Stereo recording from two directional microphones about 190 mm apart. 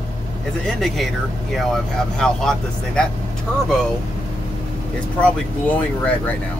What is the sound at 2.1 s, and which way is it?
Speech, 5° left (ahead or behind).